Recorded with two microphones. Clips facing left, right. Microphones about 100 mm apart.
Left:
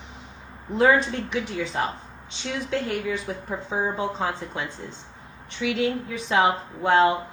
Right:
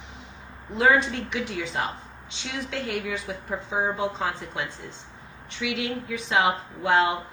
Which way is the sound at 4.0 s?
35° left (ahead or behind).